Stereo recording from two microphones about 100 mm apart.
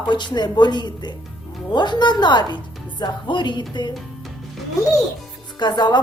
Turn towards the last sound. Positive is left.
turn(degrees=45)  # may be behind; listen again after turning